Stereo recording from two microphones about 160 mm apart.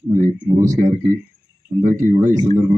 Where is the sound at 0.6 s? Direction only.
55° right (ahead or behind).